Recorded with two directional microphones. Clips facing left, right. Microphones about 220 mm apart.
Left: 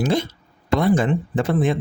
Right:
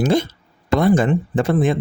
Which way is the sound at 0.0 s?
45° right (ahead or behind).